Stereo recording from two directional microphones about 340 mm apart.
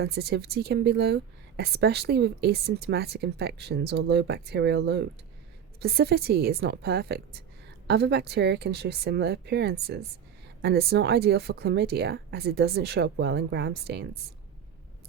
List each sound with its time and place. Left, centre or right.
0.0 s a woman's voice: right